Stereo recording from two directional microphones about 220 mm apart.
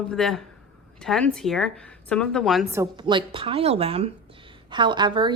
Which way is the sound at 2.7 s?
20° right (ahead or behind).